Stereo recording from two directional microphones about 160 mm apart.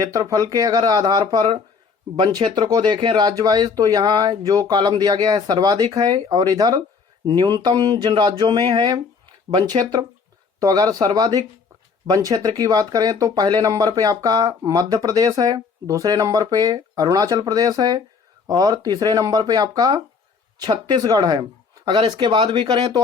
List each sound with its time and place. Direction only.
0.0 s speech: 20° right (ahead or behind)